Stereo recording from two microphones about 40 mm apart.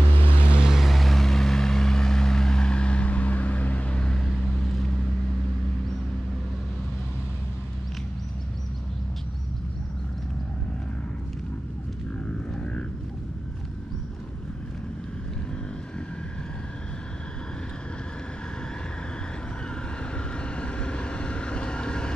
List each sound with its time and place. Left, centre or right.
0.2 s vehicle: left
0.7 s vehicle: centre; by 4.2 s left
4.2 s vehicle: centre
20.5 s vehicle: left